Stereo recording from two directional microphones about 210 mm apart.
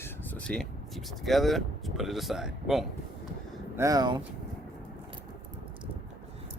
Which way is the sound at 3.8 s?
15° right (ahead or behind).